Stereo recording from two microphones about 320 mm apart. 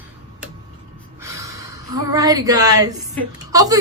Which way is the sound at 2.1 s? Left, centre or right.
Centre.